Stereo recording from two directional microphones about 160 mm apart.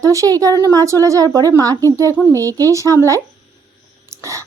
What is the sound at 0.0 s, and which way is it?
Speech, 20° right (ahead or behind).